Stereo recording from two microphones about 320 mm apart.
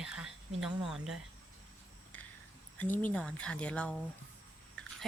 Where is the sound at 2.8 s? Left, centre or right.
Centre.